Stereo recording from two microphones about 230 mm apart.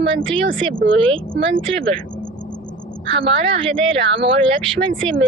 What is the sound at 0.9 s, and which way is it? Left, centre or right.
Speech, right.